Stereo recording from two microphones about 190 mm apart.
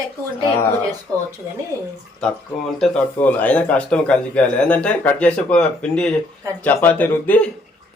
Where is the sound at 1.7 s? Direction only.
15° right (ahead or behind).